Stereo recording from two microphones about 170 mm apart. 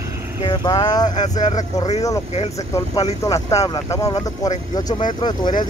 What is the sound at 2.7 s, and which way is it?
Speech, 20° left (ahead or behind).